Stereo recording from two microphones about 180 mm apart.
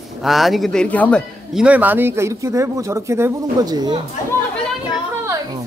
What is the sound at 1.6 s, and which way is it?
Speech, 10° right (ahead or behind).